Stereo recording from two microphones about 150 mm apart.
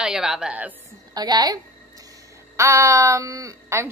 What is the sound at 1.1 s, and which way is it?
A woman's voice, 25° right (ahead or behind).